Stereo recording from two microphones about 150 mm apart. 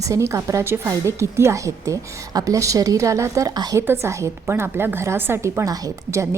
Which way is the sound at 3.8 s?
15° right (ahead or behind).